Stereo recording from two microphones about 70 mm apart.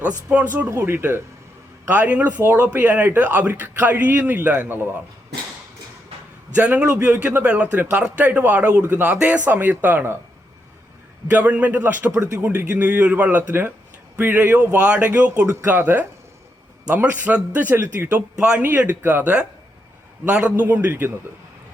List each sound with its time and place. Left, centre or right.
0.0 s a man's voice: centre
0.8 s speech: right
1.9 s a man's voice: right
6.6 s a man's voice: right
11.3 s a man's voice: right
12.3 s speech: right
12.5 s a man's voice: centre
18.3 s speech: centre
18.6 s a man's voice: right